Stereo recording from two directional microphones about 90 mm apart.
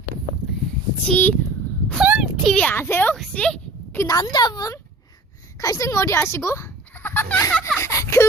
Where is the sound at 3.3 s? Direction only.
15° left (ahead or behind).